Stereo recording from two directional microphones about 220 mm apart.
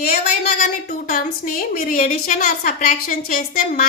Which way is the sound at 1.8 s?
35° left (ahead or behind).